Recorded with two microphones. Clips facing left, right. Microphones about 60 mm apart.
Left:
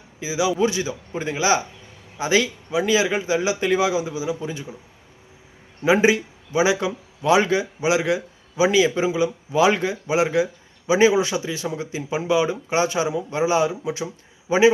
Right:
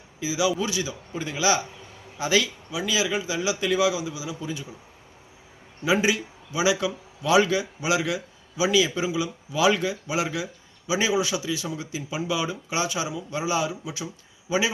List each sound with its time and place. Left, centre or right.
0.2 s a man's voice: left
5.8 s a man's voice: left